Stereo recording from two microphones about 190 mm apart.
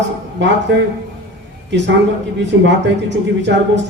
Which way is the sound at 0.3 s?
70° right (ahead or behind).